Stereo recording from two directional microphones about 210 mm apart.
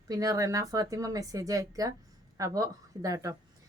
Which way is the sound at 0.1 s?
15° right (ahead or behind).